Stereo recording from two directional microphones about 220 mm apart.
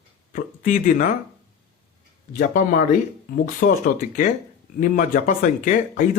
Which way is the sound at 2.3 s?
40° left (ahead or behind).